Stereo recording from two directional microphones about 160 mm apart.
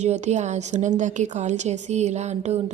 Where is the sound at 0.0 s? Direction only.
45° right (ahead or behind).